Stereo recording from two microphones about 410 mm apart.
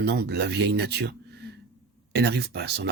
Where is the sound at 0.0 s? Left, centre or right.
Right.